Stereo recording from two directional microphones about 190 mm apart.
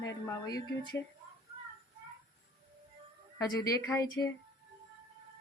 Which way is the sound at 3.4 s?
20° left (ahead or behind).